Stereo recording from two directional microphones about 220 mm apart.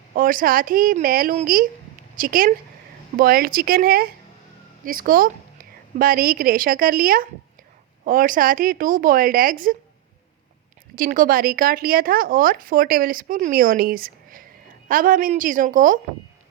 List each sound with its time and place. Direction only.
0.1 s speech: 40° right (ahead or behind)
10.9 s speech: 40° right (ahead or behind)